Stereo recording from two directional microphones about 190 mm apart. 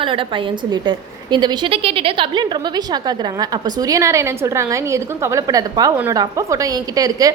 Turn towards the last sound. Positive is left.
turn(degrees=-20)  # may be behind; listen again after turning